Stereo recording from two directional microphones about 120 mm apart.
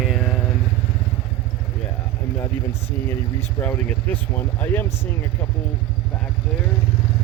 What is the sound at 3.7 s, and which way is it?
Speech, 15° left (ahead or behind).